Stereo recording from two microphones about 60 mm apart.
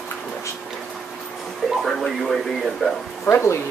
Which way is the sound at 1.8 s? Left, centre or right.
Centre.